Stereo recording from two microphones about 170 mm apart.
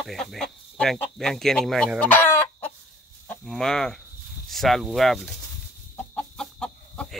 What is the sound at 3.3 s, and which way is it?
Speech, 5° left (ahead or behind).